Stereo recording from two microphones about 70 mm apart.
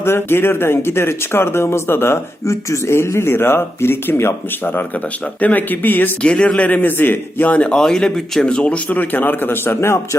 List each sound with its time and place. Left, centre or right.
0.0 s a man's voice: left
7.7 s a man's voice: centre; by 9.6 s left
9.6 s speech: left